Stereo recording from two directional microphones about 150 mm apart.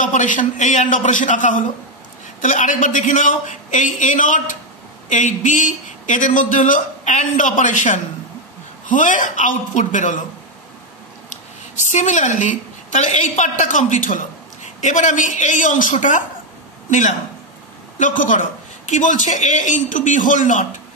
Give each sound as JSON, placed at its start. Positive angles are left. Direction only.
{"t": 0.0, "sound": "a man's voice", "side_deg": 60}
{"t": 11.2, "sound": "a woman's voice", "side_deg": 55}
{"t": 17.9, "sound": "a man's voice", "side_deg": 60}